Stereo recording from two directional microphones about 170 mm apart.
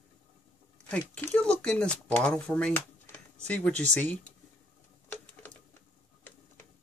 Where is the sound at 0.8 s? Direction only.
5° left (ahead or behind).